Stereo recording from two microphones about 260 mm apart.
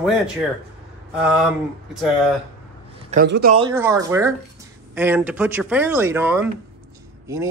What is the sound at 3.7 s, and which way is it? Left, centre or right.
Speech, centre.